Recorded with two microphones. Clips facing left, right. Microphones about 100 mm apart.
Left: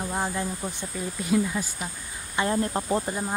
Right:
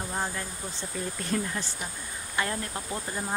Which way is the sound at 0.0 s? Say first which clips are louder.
Left 4 dB; 15° left (ahead or behind).